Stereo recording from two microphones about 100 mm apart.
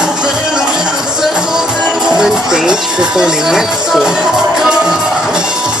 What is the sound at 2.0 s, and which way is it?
Music, 5° right (ahead or behind).